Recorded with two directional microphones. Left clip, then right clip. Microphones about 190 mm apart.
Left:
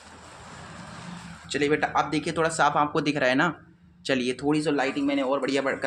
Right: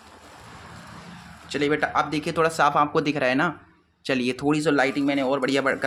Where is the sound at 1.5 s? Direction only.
25° right (ahead or behind).